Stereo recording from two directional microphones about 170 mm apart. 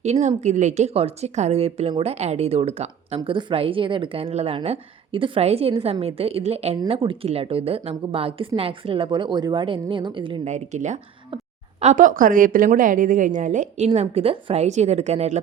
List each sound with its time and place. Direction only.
0.0 s a woman's voice: 40° right (ahead or behind)
10.4 s a woman's voice: 45° right (ahead or behind)